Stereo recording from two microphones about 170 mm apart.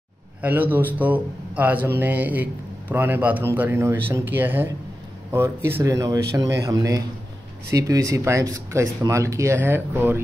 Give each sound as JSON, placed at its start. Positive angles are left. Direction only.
{"t": 0.4, "sound": "speech", "side_deg": -10}